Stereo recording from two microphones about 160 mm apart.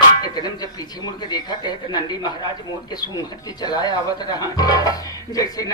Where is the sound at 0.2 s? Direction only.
25° left (ahead or behind).